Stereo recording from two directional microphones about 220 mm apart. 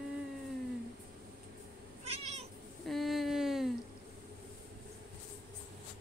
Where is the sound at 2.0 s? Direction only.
30° right (ahead or behind).